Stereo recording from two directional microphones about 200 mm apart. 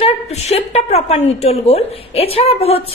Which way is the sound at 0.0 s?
30° left (ahead or behind).